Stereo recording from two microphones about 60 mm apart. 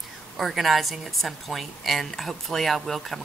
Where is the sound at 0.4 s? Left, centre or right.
Centre.